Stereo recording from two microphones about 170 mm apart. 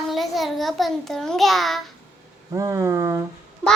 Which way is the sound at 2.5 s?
20° right (ahead or behind).